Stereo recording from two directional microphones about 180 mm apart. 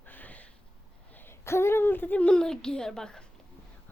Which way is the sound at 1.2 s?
15° left (ahead or behind).